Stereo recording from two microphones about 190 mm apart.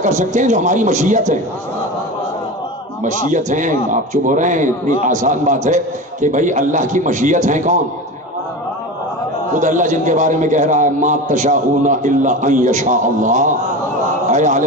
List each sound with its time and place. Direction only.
0.0 s a man's voice: 40° right (ahead or behind)
3.0 s a man's voice: 40° right (ahead or behind)
9.5 s a man's voice: 40° right (ahead or behind)